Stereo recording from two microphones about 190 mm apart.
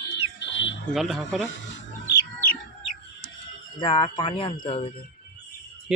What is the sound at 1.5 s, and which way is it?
Wild animals, 75° left (ahead or behind).